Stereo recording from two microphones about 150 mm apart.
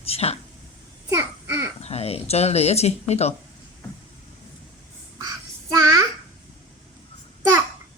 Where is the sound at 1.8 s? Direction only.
45° left (ahead or behind).